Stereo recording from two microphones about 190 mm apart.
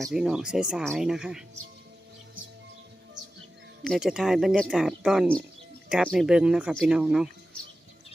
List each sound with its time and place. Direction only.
0.0 s speech: centre (ahead or behind)
3.8 s speech: centre (ahead or behind)